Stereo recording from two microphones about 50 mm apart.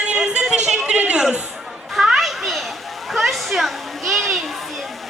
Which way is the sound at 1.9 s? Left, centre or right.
Centre.